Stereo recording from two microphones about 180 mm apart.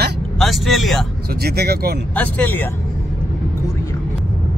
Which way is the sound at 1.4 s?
60° right (ahead or behind).